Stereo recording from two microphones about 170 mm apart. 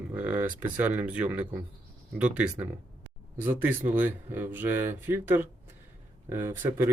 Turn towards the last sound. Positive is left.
turn(degrees=-15)  # may be behind; listen again after turning